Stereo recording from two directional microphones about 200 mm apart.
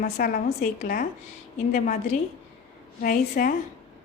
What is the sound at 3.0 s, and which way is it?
Speech, 45° left (ahead or behind).